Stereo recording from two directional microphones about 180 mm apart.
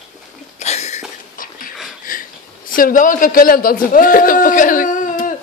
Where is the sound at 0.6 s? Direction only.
40° left (ahead or behind).